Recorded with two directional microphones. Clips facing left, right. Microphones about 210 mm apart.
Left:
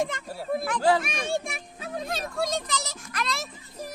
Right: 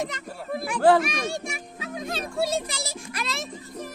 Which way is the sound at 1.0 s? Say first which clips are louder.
Even; 55° left (ahead or behind).